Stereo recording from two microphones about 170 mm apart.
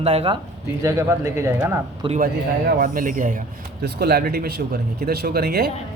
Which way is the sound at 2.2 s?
55° right (ahead or behind).